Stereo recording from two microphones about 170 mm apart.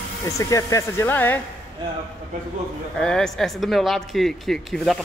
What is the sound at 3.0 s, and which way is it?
Speech, 5° left (ahead or behind).